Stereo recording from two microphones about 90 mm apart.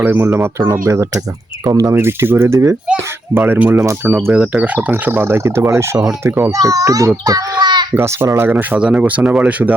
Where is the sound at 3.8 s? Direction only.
35° right (ahead or behind).